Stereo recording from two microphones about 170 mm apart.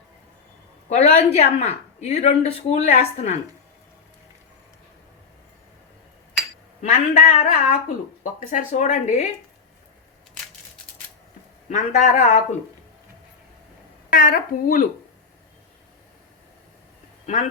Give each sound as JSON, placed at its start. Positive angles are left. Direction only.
{"t": 0.9, "sound": "speech", "side_deg": 40}
{"t": 7.1, "sound": "speech", "side_deg": 45}
{"t": 11.7, "sound": "speech", "side_deg": 45}
{"t": 14.1, "sound": "speech", "side_deg": 55}